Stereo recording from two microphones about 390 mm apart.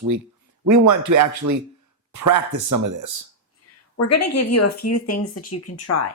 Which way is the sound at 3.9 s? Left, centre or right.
Left.